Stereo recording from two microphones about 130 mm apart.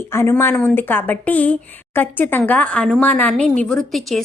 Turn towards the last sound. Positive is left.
turn(degrees=0)  # may be behind; listen again after turning